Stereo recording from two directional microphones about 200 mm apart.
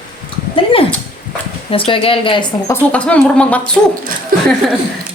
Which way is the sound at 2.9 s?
5° left (ahead or behind).